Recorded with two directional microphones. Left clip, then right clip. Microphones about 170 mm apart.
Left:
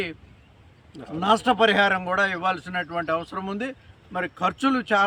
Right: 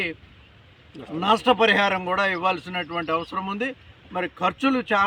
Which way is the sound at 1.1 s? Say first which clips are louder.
Right 1 dB; 20° left (ahead or behind).